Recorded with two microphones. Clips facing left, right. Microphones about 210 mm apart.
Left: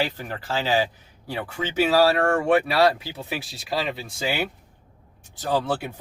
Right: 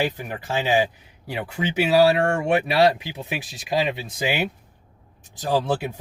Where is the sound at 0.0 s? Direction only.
15° right (ahead or behind).